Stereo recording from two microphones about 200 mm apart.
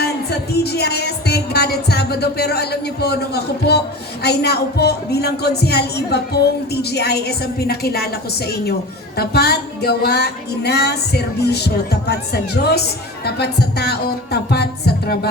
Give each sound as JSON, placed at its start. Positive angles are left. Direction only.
{"t": 0.0, "sound": "music", "side_deg": 55}
{"t": 9.1, "sound": "a sound", "side_deg": 55}
{"t": 13.2, "sound": "music", "side_deg": 55}